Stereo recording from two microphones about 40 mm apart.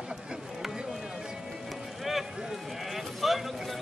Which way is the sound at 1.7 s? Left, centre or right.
Centre.